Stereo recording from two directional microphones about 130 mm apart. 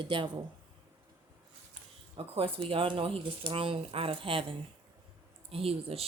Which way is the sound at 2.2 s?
45° right (ahead or behind).